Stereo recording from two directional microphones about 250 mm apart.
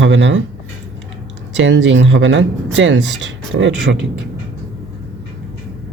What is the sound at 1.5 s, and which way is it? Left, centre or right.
Speech, right.